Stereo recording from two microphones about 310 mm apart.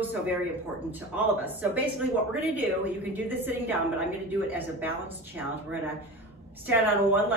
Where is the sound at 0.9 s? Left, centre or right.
Centre.